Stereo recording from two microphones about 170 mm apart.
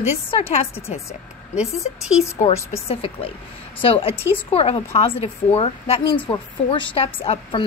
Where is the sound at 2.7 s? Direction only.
35° left (ahead or behind).